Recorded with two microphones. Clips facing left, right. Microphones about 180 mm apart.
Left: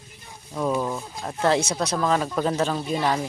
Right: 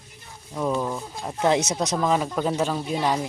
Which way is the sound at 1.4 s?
20° right (ahead or behind).